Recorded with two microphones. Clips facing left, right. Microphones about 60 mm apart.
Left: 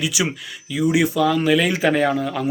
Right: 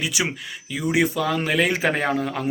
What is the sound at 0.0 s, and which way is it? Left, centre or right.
Speech, right.